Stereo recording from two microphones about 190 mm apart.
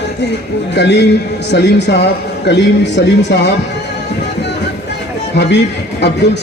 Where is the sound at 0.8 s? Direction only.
65° left (ahead or behind).